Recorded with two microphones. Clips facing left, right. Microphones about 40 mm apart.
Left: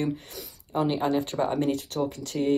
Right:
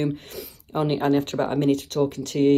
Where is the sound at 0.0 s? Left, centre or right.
Right.